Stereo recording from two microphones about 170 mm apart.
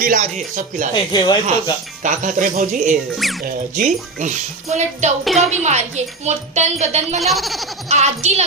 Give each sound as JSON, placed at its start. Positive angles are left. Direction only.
{"t": 0.0, "sound": "speech", "side_deg": -50}
{"t": 0.9, "sound": "speech", "side_deg": 25}
{"t": 2.0, "sound": "speech", "side_deg": -50}
{"t": 3.1, "sound": "speech", "side_deg": 0}
{"t": 3.4, "sound": "speech", "side_deg": -45}
{"t": 5.2, "sound": "speech", "side_deg": 0}
{"t": 5.5, "sound": "speech", "side_deg": -40}
{"t": 7.2, "sound": "speech", "side_deg": 0}
{"t": 7.9, "sound": "speech", "side_deg": -40}